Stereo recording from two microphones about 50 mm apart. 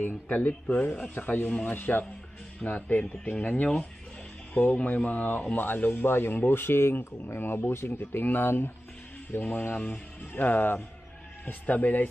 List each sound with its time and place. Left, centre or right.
0.0 s speech: left
4.7 s speech: left
8.0 s speech: left